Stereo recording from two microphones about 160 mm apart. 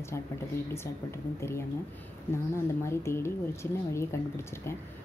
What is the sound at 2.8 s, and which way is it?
Speech, 15° left (ahead or behind).